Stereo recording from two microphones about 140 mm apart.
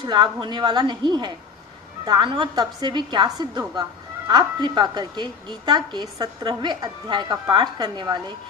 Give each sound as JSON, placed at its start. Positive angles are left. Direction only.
{"t": 0.0, "sound": "a woman's voice", "side_deg": -35}